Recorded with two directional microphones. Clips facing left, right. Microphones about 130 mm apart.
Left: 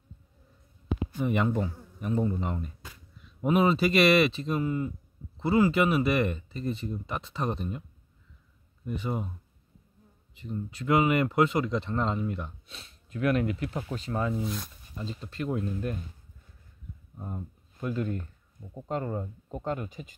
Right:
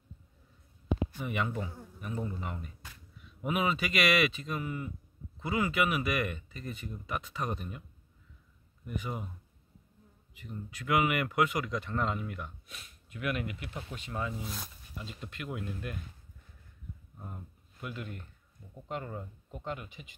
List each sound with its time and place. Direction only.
1.2 s speech: 35° left (ahead or behind)
8.8 s speech: 30° left (ahead or behind)
10.3 s speech: 30° left (ahead or behind)
17.2 s speech: 35° left (ahead or behind)